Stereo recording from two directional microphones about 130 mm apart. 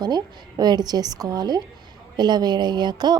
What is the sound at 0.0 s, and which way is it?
A woman's voice, 30° right (ahead or behind).